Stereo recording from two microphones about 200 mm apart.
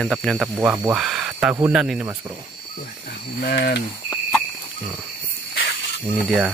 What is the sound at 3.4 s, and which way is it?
Cricket, 50° left (ahead or behind).